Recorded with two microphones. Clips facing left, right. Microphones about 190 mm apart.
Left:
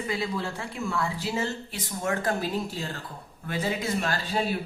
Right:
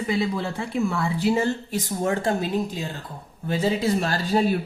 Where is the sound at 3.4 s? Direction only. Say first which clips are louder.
Right 6 dB; 30° right (ahead or behind).